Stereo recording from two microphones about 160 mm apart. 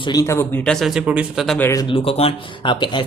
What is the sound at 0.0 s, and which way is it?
Speech, 25° left (ahead or behind).